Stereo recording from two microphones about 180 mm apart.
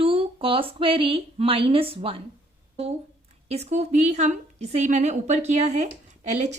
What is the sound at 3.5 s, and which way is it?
Speech, 35° right (ahead or behind).